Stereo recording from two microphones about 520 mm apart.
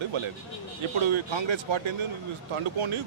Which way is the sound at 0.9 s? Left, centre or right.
Right.